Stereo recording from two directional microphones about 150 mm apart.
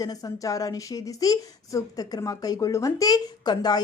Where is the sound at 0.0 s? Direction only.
25° left (ahead or behind).